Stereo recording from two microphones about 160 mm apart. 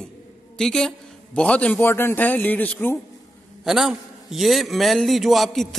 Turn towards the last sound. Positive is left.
turn(degrees=0)  # may be behind; listen again after turning